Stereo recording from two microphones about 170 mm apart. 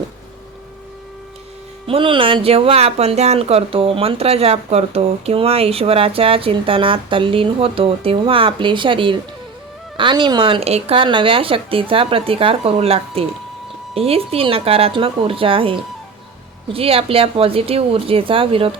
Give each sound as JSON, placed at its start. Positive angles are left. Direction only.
{"t": 1.9, "sound": "speech", "side_deg": -30}